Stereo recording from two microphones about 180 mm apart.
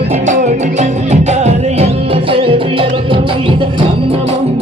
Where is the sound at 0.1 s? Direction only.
40° right (ahead or behind).